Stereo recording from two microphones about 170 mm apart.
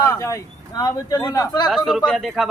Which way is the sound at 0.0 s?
15° left (ahead or behind).